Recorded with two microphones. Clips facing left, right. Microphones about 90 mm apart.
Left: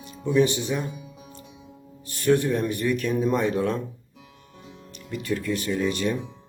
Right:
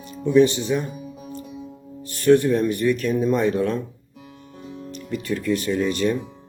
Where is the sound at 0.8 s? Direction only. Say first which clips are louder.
Right 3 dB; 50° right (ahead or behind).